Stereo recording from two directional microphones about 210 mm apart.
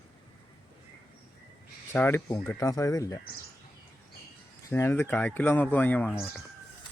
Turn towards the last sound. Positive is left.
turn(degrees=5)  # may be behind; listen again after turning